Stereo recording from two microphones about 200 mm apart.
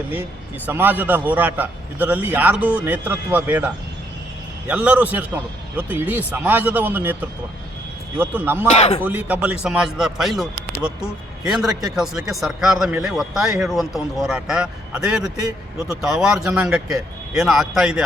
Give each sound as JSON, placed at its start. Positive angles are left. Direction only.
{"t": 0.1, "sound": "a man's voice", "side_deg": -10}
{"t": 4.7, "sound": "a man's voice", "side_deg": -5}
{"t": 8.7, "sound": "speech", "side_deg": 35}
{"t": 9.0, "sound": "speech", "side_deg": -10}